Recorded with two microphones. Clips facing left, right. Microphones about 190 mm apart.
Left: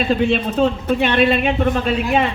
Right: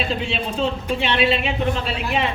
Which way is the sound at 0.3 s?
55° left (ahead or behind).